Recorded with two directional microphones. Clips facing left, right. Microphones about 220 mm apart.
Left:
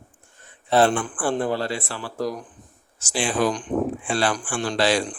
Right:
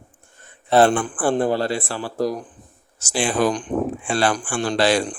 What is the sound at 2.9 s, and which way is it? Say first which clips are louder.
Speech: right 3 dB; 50° right (ahead or behind).